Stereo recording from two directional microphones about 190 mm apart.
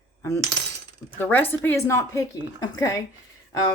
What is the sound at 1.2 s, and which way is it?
Speech, 10° left (ahead or behind).